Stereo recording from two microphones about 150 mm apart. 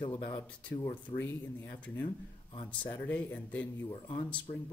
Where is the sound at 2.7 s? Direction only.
10° left (ahead or behind).